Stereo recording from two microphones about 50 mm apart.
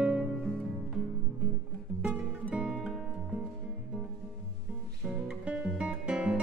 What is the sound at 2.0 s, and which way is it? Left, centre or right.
Music, right.